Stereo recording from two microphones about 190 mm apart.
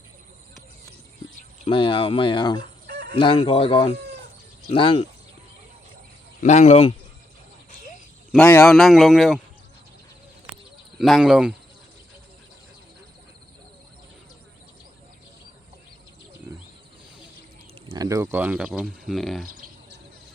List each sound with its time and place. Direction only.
1.6 s speech: 25° left (ahead or behind)
2.8 s chicken: 60° right (ahead or behind)
3.2 s speech: 25° left (ahead or behind)
6.4 s speech: 35° left (ahead or behind)
8.3 s a man's voice: 5° left (ahead or behind)
10.9 s a man's voice: centre (ahead or behind)
17.8 s speech: 20° right (ahead or behind); by 19.5 s centre (ahead or behind)